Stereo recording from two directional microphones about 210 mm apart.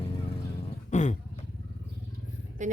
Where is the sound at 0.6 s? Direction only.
30° left (ahead or behind).